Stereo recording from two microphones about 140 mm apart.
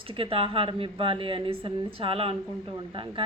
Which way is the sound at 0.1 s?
40° right (ahead or behind).